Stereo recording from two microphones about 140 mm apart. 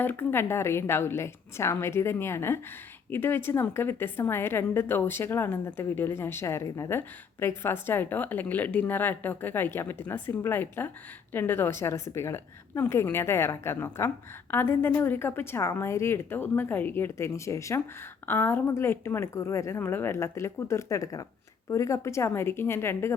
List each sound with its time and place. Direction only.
0.0 s a woman's voice: 15° left (ahead or behind)